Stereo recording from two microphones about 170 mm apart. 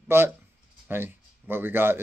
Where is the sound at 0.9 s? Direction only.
10° right (ahead or behind).